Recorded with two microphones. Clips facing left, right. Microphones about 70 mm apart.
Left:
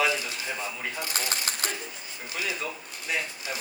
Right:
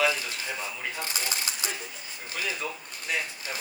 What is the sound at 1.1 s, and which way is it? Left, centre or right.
Speech, left.